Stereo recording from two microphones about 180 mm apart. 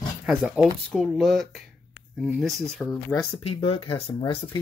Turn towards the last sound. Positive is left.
turn(degrees=30)  # may be behind; listen again after turning